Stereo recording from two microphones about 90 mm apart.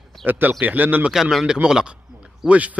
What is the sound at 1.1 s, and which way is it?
A man's voice, 5° right (ahead or behind).